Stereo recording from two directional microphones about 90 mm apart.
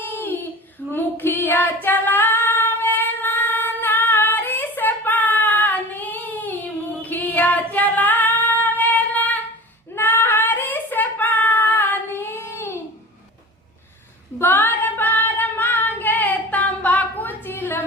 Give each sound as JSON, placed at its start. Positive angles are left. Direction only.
{"t": 0.0, "sound": "a sound", "side_deg": 20}
{"t": 0.9, "sound": "female singing", "side_deg": 25}
{"t": 14.3, "sound": "female singing", "side_deg": 20}